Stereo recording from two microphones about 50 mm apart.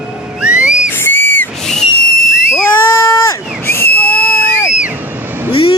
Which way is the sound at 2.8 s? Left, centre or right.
Left.